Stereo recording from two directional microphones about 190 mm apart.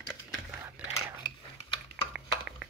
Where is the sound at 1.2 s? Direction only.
25° left (ahead or behind).